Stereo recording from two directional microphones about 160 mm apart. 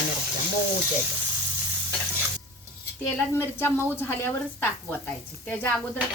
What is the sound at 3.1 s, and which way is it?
Speech, 15° left (ahead or behind).